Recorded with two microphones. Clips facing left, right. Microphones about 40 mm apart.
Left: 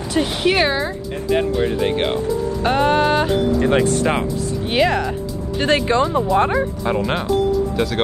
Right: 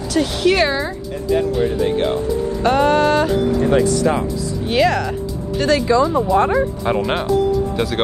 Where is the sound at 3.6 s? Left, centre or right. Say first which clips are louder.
Right 1 dB; left.